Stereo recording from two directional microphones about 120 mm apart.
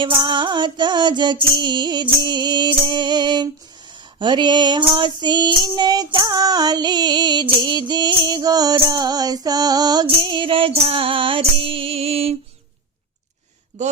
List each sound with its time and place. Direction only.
0.0 s female singing: 40° right (ahead or behind)
10.1 s music: 45° right (ahead or behind)